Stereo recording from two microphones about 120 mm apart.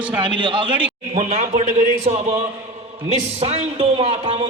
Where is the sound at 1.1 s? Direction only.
85° right.